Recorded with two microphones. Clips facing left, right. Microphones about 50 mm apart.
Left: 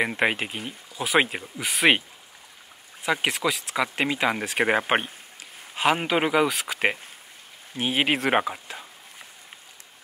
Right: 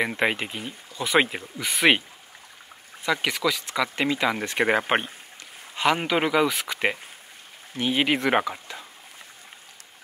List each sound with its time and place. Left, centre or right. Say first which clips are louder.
0.0 s speech: left 1 dB; centre
3.2 s speech: even; centre
4.4 s speech: even; centre